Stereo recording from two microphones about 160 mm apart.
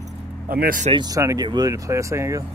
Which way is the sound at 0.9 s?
25° right (ahead or behind).